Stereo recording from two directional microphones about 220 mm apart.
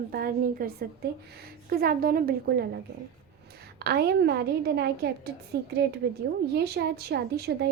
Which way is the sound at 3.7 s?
45° right (ahead or behind).